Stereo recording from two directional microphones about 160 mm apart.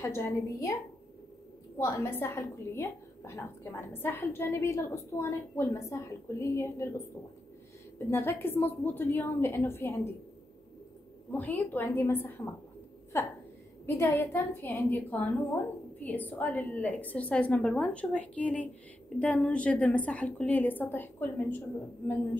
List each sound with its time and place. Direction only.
0.0 s a woman's voice: 15° left (ahead or behind)
1.8 s a woman's voice: 20° left (ahead or behind)
8.1 s a woman's voice: 15° left (ahead or behind)
11.3 s a woman's voice: 10° left (ahead or behind)